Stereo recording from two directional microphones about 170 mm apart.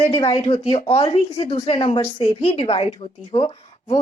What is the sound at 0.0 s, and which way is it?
A woman's voice, 30° left (ahead or behind).